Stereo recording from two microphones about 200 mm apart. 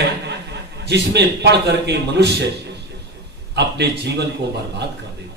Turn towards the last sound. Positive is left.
turn(degrees=-55)  # may be behind; listen again after turning